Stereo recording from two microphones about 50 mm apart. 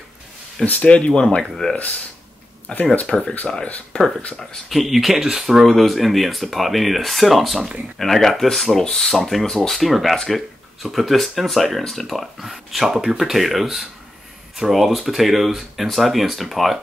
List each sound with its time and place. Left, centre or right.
0.7 s speech: left; by 3.3 s centre
3.6 s speech: left
4.6 s speech: centre